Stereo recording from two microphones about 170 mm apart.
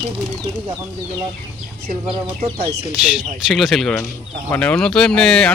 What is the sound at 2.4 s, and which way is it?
Speech, 35° right (ahead or behind).